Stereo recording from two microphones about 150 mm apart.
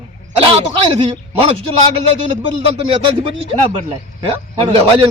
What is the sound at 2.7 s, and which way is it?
A man's voice, 35° right (ahead or behind).